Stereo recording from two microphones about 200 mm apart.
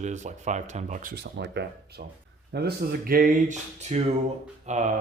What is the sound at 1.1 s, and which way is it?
Speech, 60° right (ahead or behind).